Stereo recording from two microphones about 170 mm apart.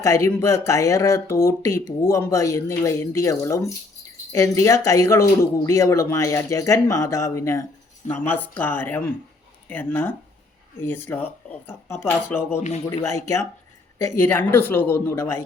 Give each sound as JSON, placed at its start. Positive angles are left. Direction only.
{"t": 0.0, "sound": "speech", "side_deg": 15}
{"t": 12.5, "sound": "speech", "side_deg": 40}
{"t": 13.1, "sound": "speech", "side_deg": 15}